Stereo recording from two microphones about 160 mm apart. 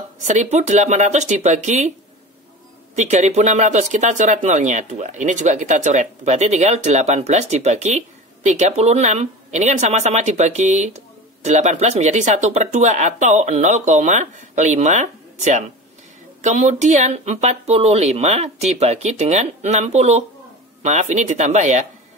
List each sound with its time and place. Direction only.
0.2 s speech: 45° right (ahead or behind)
3.0 s speech: 45° right (ahead or behind)